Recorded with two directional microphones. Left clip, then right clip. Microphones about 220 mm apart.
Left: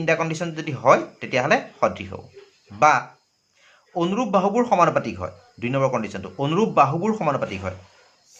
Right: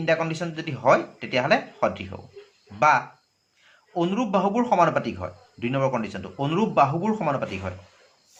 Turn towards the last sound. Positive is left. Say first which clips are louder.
# left 3 dB
turn(degrees=20)  # may be behind; listen again after turning